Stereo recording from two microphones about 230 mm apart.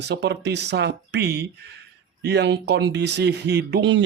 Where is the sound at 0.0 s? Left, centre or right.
Right.